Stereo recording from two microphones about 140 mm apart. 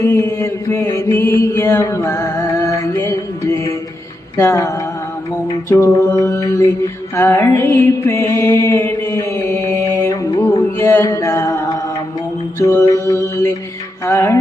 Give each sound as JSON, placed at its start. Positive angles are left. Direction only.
{"t": 0.0, "sound": "mantra", "side_deg": 20}
{"t": 10.4, "sound": "music", "side_deg": 20}
{"t": 12.5, "sound": "mantra", "side_deg": 20}
{"t": 14.0, "sound": "music", "side_deg": 15}